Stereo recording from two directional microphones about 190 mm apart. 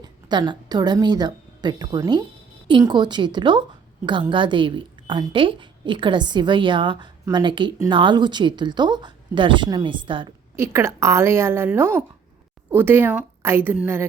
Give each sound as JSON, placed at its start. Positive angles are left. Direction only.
{"t": 0.0, "sound": "a woman's voice", "side_deg": -20}
{"t": 10.6, "sound": "a woman's voice", "side_deg": -15}